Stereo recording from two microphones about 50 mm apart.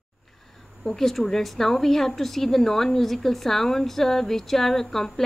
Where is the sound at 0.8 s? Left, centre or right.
Centre.